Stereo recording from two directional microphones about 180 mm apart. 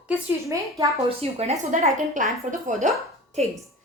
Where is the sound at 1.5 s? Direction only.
45° right (ahead or behind).